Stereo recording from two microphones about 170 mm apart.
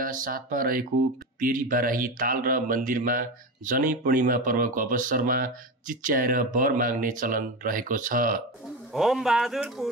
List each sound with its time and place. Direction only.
0.0 s speech: 55° right (ahead or behind)
8.9 s speech: centre (ahead or behind)